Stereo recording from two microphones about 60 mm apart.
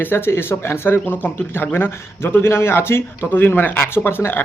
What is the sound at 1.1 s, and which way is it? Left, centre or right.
Speech, left.